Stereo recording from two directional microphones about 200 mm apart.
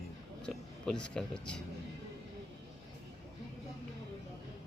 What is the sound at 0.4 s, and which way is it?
Speech, 5° left (ahead or behind).